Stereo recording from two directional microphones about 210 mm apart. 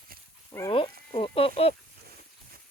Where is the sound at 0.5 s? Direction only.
10° left (ahead or behind).